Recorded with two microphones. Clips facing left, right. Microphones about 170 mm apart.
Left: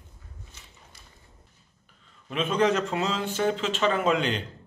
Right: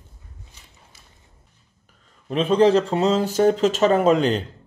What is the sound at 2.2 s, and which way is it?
Speech, 35° right (ahead or behind).